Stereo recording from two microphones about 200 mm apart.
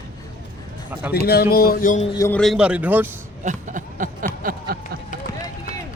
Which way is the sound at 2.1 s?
15° left (ahead or behind).